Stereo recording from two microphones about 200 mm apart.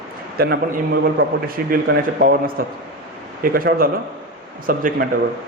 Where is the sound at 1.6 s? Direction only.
45° right (ahead or behind).